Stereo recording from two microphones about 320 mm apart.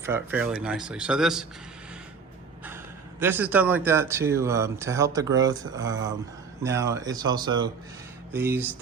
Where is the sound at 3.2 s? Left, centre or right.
Centre.